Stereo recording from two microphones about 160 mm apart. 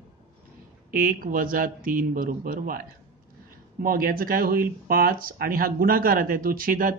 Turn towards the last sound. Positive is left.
turn(degrees=-60)  # may be behind; listen again after turning